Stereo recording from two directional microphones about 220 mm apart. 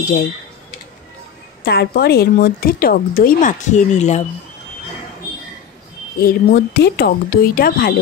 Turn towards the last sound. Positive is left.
turn(degrees=40)  # may be behind; listen again after turning